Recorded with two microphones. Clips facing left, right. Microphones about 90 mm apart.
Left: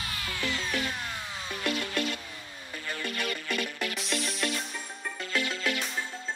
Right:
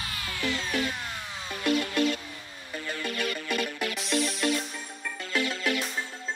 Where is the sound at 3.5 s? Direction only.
35° right (ahead or behind).